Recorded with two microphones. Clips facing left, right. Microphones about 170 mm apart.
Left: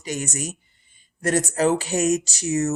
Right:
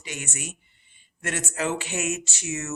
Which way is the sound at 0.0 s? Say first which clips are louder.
Left 8 dB; 40° left (ahead or behind).